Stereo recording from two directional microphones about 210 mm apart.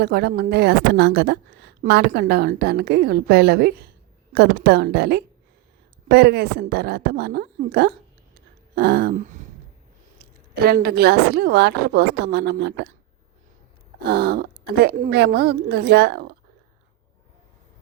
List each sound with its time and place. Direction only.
0.0 s a woman's voice: 50° right (ahead or behind)
8.7 s a sound: 45° right (ahead or behind)
10.2 s a woman's voice: 45° right (ahead or behind)
14.1 s a woman's voice: 50° right (ahead or behind)